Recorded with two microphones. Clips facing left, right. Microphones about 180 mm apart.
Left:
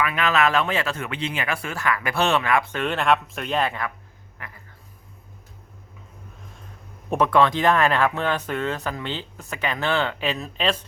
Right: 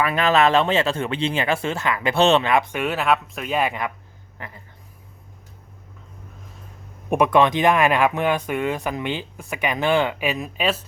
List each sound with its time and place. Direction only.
0.0 s speech: 35° right (ahead or behind); by 3.9 s 15° right (ahead or behind)
4.4 s a sound: 30° right (ahead or behind)
7.1 s speech: 15° right (ahead or behind)